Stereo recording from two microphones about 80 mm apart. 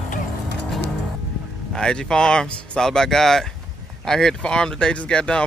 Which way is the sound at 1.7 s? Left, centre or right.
Centre.